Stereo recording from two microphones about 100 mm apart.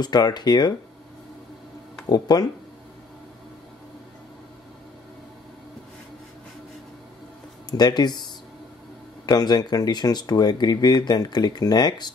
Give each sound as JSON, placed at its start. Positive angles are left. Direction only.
{"t": 0.0, "sound": "speech", "side_deg": 45}
{"t": 2.0, "sound": "speech", "side_deg": 40}
{"t": 7.7, "sound": "speech", "side_deg": 45}